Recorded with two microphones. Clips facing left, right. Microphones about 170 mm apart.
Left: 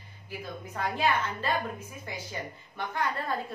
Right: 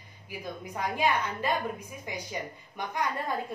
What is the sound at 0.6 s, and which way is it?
A woman's voice, 15° right (ahead or behind).